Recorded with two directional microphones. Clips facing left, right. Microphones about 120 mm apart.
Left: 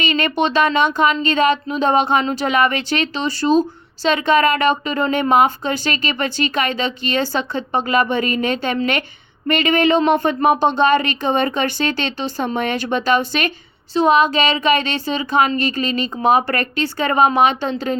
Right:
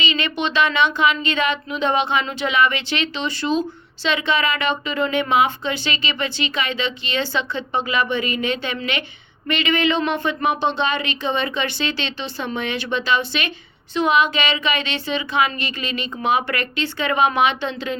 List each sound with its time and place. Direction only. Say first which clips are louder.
0.0 s a woman's voice: left 5 dB; 45° left (ahead or behind)